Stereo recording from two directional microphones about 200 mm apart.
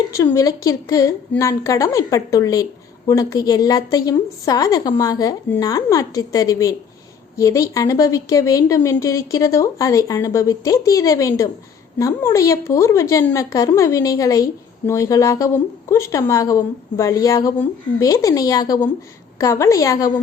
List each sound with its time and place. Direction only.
0.1 s a woman's voice: 15° left (ahead or behind)